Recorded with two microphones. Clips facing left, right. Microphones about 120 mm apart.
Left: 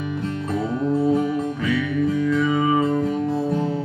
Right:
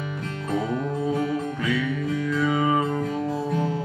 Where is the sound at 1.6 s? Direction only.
Centre (ahead or behind).